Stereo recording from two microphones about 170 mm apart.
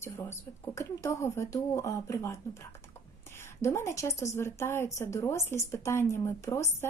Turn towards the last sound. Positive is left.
turn(degrees=15)  # may be behind; listen again after turning